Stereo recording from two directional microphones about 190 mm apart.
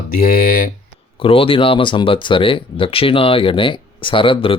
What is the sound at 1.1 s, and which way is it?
Speech, 30° left (ahead or behind).